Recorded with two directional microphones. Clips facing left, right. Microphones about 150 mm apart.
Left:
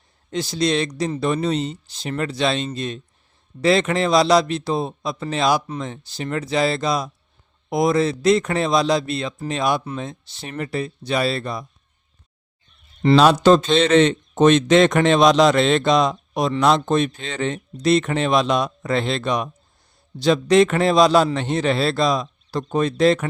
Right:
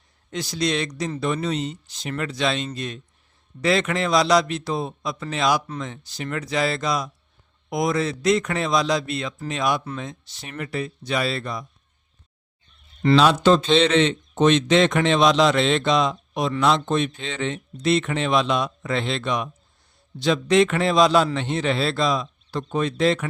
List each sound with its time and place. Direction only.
0.3 s a man's voice: 30° left (ahead or behind)
13.1 s a man's voice: 45° left (ahead or behind)